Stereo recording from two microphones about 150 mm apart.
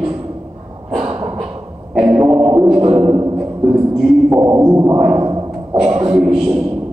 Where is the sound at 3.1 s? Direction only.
25° right (ahead or behind).